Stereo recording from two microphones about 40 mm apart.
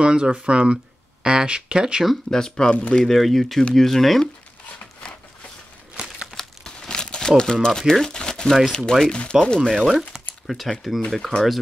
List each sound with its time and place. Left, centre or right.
0.0 s speech: right
2.3 s speech: centre
3.1 s speech: centre
6.3 s crumpling: centre
7.6 s speech: centre
8.0 s crumpling: centre
8.9 s speech: left
9.8 s speech: centre
11.1 s speech: centre